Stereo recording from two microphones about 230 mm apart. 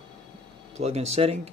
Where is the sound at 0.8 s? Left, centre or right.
Right.